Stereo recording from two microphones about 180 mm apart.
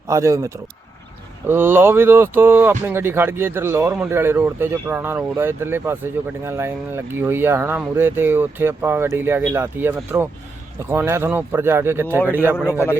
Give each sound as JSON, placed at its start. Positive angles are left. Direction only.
{"t": 0.1, "sound": "speech", "side_deg": -15}